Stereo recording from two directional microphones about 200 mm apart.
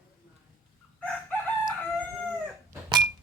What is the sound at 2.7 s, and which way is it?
Dog, 20° right (ahead or behind).